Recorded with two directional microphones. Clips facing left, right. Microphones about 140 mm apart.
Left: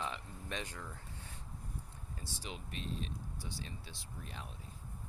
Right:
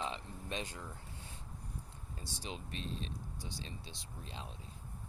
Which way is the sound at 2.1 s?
25° right (ahead or behind).